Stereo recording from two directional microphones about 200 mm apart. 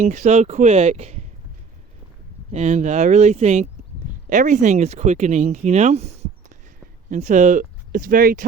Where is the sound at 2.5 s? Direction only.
35° right (ahead or behind).